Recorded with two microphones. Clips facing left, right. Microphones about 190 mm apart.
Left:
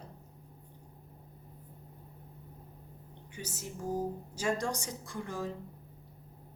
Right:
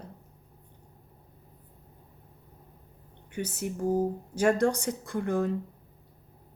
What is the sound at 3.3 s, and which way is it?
Speech, 60° right (ahead or behind).